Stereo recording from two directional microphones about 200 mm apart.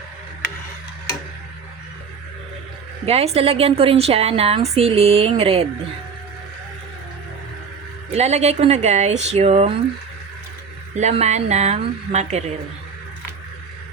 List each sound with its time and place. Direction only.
3.1 s a woman's voice: 30° right (ahead or behind)
8.1 s speech: 35° right (ahead or behind)
10.9 s speech: 35° right (ahead or behind)